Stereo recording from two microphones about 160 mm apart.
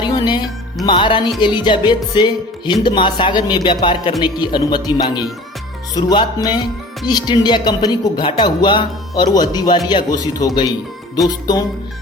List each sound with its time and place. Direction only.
0.0 s music: 30° left (ahead or behind)
1.4 s speech: 30° left (ahead or behind)
5.9 s speech: 25° left (ahead or behind)